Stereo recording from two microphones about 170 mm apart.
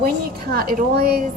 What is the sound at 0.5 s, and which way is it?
Speech, 60° right (ahead or behind).